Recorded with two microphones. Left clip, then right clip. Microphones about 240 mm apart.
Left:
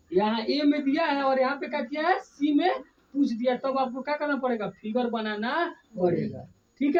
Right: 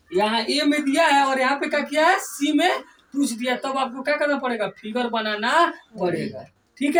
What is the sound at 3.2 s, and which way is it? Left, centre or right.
Speech, left.